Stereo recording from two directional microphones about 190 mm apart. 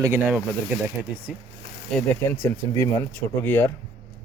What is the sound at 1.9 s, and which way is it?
Speech, 5° left (ahead or behind).